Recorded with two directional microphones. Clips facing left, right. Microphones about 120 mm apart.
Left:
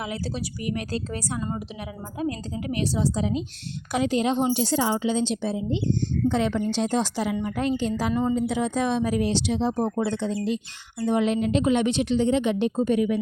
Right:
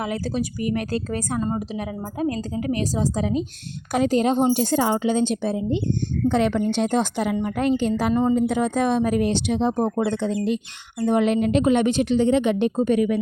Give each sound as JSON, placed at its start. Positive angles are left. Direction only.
{"t": 0.0, "sound": "a woman's voice", "side_deg": -50}
{"t": 1.4, "sound": "a woman's voice", "side_deg": -35}